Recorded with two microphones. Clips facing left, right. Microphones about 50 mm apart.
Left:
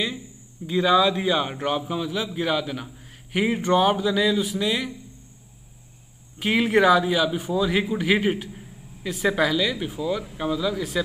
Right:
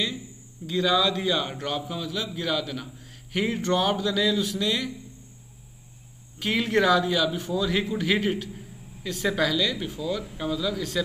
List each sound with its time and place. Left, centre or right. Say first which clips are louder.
0.7 s a man's voice: left 4 dB; centre
6.4 s a man's voice: left 4 dB; centre